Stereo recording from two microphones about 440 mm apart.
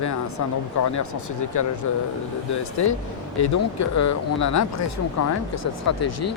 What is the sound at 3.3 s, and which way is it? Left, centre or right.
Speech, left.